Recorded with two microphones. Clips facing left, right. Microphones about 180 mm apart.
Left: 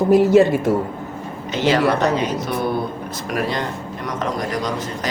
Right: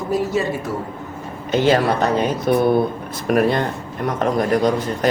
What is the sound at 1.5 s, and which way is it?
A man's voice, 50° right (ahead or behind).